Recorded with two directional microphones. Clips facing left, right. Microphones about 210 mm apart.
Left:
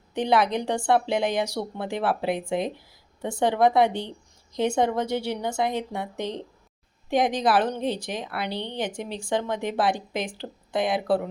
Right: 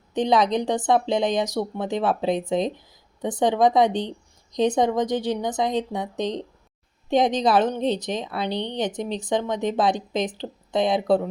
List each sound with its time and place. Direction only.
0.1 s a woman's voice: 20° right (ahead or behind)
2.7 s a sound: 20° right (ahead or behind)
3.6 s a woman's voice: 15° right (ahead or behind)